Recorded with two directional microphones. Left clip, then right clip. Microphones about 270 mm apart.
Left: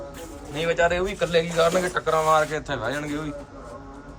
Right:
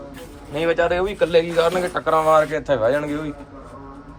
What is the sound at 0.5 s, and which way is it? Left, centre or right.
Speech, centre.